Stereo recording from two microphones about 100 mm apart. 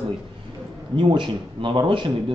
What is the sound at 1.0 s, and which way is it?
Speech, 55° right (ahead or behind).